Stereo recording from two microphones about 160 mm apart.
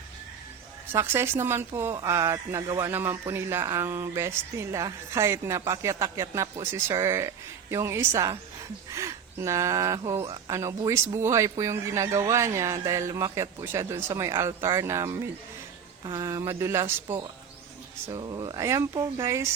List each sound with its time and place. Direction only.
0.9 s a man's voice: 15° right (ahead or behind)
18.1 s a man's voice: 25° right (ahead or behind)